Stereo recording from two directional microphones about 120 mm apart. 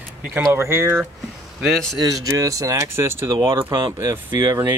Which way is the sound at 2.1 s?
30° right (ahead or behind).